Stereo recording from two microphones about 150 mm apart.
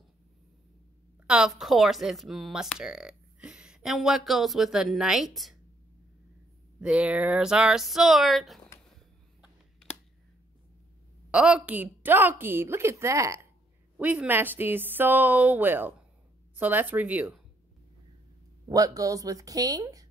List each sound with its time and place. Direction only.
1.2 s speech: 5° right (ahead or behind)
6.8 s speech: 10° right (ahead or behind)
11.3 s a woman's voice: 10° right (ahead or behind)
13.9 s a woman's voice: 10° right (ahead or behind)
18.7 s speech: 25° right (ahead or behind)